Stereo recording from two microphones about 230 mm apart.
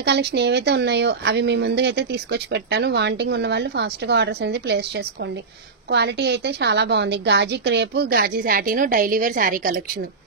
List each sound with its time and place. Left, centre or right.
0.0 s speech: right